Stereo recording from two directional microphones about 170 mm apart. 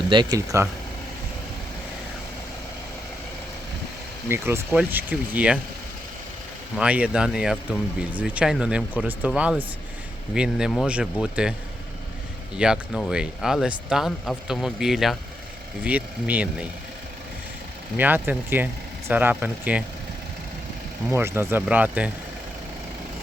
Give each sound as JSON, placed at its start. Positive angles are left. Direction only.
{"t": 0.1, "sound": "speech", "side_deg": -25}
{"t": 4.3, "sound": "speech", "side_deg": -15}
{"t": 6.7, "sound": "speech", "side_deg": -5}
{"t": 12.5, "sound": "speech", "side_deg": -5}
{"t": 17.9, "sound": "speech", "side_deg": -10}
{"t": 21.1, "sound": "speech", "side_deg": -15}